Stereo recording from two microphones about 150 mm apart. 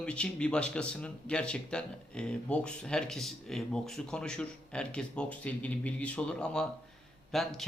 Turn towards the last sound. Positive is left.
turn(degrees=0)  # may be behind; listen again after turning